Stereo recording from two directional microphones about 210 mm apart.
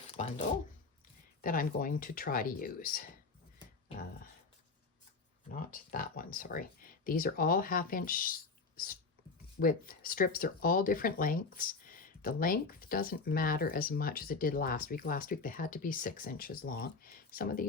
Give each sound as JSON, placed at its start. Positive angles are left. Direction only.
{"t": 0.1, "sound": "speech", "side_deg": 30}
{"t": 5.5, "sound": "speech", "side_deg": 40}